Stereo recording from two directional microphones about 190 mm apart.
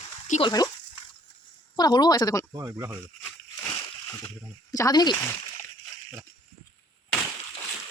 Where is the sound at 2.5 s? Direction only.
15° right (ahead or behind).